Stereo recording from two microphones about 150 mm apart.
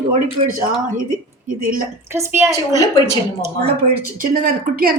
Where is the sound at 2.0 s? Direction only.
15° right (ahead or behind).